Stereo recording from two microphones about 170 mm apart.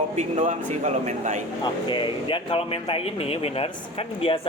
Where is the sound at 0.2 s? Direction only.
45° right (ahead or behind).